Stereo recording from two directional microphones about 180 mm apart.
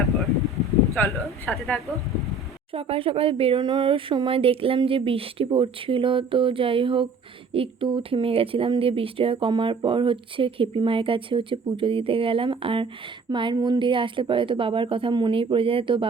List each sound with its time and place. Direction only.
1.0 s speech: 10° left (ahead or behind)
2.7 s speech: 30° right (ahead or behind)